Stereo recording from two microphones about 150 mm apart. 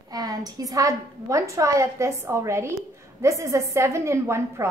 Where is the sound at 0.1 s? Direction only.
25° right (ahead or behind).